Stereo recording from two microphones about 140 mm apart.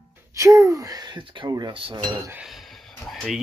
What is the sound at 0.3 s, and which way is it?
Speech, 20° right (ahead or behind).